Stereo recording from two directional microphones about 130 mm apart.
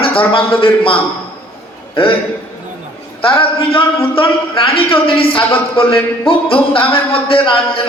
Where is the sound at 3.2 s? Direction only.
45° left (ahead or behind).